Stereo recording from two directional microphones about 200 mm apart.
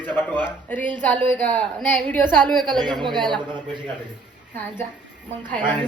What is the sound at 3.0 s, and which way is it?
Speech, 20° right (ahead or behind).